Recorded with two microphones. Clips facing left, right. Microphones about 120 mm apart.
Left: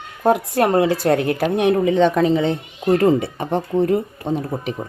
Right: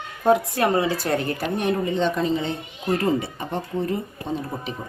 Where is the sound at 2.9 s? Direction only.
80° left.